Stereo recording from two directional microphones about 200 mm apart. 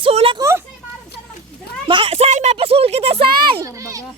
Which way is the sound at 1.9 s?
25° right (ahead or behind).